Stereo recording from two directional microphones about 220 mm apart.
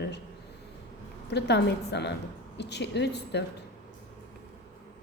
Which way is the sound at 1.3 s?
50° left (ahead or behind).